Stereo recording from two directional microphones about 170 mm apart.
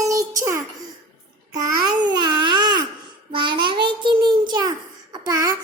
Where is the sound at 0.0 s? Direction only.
20° right (ahead or behind).